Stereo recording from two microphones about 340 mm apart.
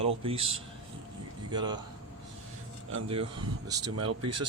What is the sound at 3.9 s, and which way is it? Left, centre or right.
Speech, right.